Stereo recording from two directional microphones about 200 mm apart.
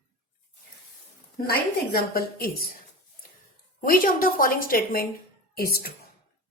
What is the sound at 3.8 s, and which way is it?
A woman's voice, 45° left (ahead or behind).